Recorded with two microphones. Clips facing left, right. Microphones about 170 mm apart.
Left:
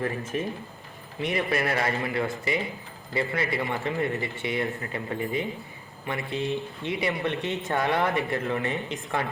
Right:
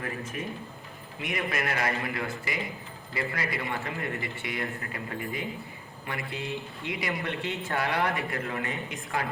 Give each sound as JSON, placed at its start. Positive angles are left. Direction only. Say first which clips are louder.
{"t": 0.3, "sound": "speech", "louder": "left 5 dB", "side_deg": 35}